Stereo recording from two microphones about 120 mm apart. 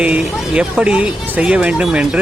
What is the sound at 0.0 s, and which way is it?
Speech, 10° right (ahead or behind).